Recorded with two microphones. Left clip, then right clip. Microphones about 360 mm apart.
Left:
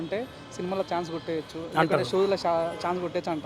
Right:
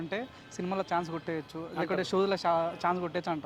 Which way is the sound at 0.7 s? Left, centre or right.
Right.